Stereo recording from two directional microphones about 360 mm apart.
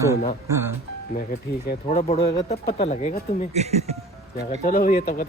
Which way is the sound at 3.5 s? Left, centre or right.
Centre.